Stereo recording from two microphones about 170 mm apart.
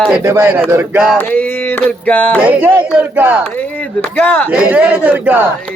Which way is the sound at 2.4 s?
10° right (ahead or behind).